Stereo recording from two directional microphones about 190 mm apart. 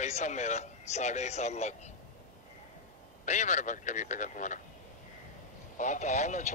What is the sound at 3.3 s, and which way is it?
A man's voice, 40° left (ahead or behind).